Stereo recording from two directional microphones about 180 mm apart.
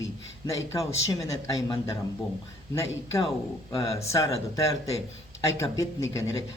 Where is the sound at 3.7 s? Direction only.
20° left (ahead or behind).